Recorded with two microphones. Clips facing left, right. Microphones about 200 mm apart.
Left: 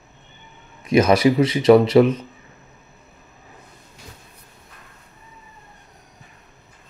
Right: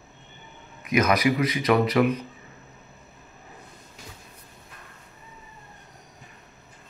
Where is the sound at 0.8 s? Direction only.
30° left (ahead or behind).